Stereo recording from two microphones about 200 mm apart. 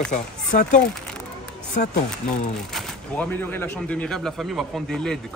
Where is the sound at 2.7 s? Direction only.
10° left (ahead or behind).